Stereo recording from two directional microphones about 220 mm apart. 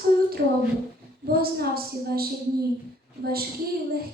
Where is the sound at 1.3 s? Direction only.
45° right (ahead or behind).